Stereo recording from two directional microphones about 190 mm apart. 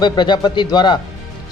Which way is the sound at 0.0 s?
20° left (ahead or behind).